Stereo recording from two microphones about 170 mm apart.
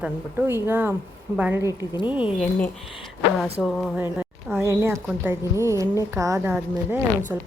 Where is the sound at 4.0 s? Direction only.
10° right (ahead or behind).